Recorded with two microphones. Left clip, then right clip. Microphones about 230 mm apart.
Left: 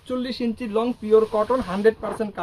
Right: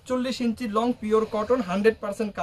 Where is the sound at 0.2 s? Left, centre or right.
Right.